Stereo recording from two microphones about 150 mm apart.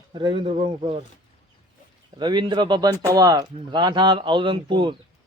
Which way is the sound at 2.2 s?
30° right (ahead or behind).